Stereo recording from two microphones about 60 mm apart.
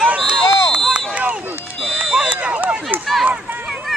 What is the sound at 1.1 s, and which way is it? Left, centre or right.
Run, right.